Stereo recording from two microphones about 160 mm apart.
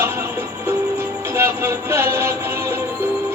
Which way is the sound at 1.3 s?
15° right (ahead or behind).